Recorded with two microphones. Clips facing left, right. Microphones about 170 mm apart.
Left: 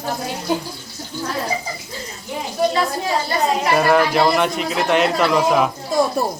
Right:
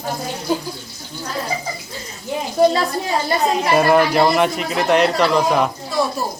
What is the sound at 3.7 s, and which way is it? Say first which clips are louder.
A man's voice: right 2 dB; centre (ahead or behind).